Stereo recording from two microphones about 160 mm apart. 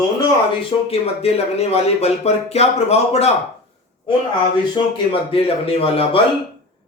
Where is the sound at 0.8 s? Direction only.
40° left (ahead or behind).